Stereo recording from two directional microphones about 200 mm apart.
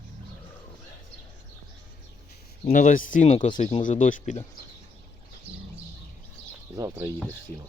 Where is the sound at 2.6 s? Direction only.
40° left (ahead or behind).